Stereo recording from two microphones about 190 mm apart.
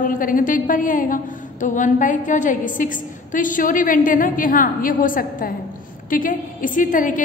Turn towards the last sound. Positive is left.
turn(degrees=45)  # may be behind; listen again after turning